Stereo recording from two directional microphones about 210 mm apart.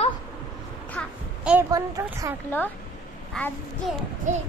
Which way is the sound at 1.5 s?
15° right (ahead or behind).